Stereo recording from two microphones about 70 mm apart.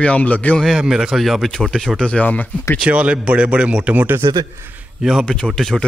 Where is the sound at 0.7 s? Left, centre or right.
Centre.